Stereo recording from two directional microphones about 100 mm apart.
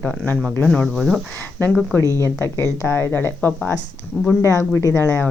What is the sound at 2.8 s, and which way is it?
Speech, 20° left (ahead or behind).